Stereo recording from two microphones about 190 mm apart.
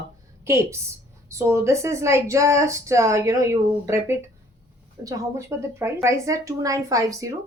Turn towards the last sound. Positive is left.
turn(degrees=-15)  # may be behind; listen again after turning